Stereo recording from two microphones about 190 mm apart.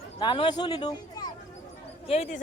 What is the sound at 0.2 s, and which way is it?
Speech, 25° left (ahead or behind).